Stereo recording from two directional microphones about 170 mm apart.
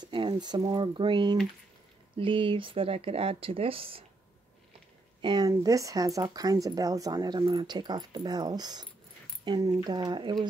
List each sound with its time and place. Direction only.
0.0 s speech: 25° right (ahead or behind)
5.2 s speech: 25° right (ahead or behind)